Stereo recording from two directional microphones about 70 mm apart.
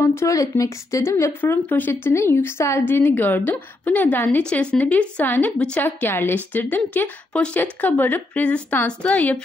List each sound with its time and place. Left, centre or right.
0.0 s a sound: left
0.4 s a woman's voice: left
1.0 s a woman's voice: left
1.4 s speech: left
2.9 s a woman's voice: left